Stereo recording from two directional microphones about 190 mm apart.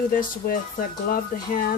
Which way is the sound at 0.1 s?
45° left (ahead or behind).